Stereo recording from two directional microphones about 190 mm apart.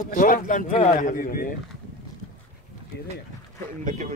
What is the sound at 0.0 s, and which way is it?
Speech, 45° left (ahead or behind).